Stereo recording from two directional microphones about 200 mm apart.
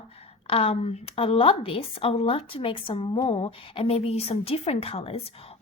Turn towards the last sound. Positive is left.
turn(degrees=30)  # may be behind; listen again after turning